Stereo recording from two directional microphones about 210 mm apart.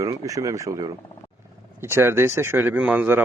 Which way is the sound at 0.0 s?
15° right (ahead or behind).